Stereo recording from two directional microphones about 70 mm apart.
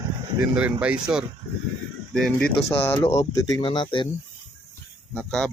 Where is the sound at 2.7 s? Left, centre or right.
Left.